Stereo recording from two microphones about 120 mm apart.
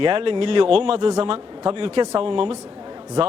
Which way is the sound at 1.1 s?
40° right (ahead or behind).